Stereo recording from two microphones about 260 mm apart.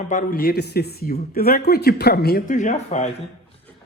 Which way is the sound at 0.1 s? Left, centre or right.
Left.